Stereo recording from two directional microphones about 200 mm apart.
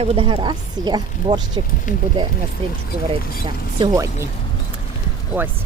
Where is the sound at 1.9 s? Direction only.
40° left (ahead or behind).